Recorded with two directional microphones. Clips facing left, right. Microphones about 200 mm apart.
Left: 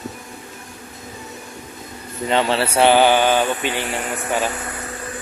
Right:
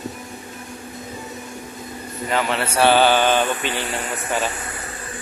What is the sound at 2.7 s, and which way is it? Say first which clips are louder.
Mantra: left 1 dB; 15° left (ahead or behind).